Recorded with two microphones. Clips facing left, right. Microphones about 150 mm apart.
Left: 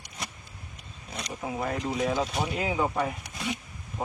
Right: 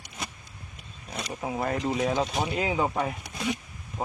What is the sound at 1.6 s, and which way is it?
Speech, centre (ahead or behind).